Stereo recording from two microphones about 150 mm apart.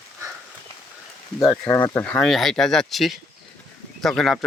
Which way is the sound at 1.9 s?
10° left (ahead or behind).